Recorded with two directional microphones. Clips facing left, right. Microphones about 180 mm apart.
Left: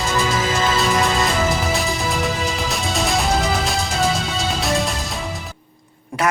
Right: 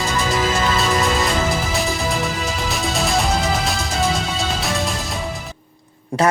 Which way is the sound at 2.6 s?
Centre (ahead or behind).